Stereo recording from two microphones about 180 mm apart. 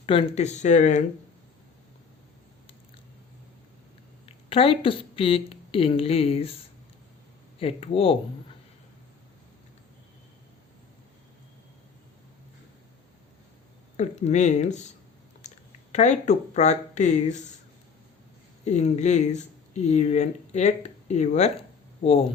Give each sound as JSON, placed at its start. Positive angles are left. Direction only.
{"t": 0.0, "sound": "speech", "side_deg": 30}
{"t": 4.3, "sound": "speech", "side_deg": 30}
{"t": 7.6, "sound": "speech", "side_deg": 30}
{"t": 13.9, "sound": "speech", "side_deg": 40}
{"t": 18.6, "sound": "speech", "side_deg": 40}